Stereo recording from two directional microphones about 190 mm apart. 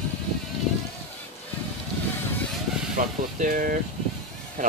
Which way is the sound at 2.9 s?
45° right (ahead or behind).